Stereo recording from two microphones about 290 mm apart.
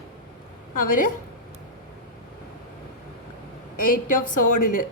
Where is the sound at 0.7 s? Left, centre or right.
Left.